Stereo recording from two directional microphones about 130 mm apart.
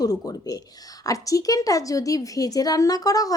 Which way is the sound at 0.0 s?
30° left (ahead or behind).